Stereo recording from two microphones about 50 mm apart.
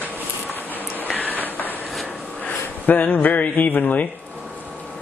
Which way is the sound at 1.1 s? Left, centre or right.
Left.